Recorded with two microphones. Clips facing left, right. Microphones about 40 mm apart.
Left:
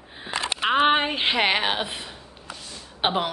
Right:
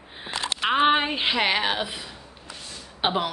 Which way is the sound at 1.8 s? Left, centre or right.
Left.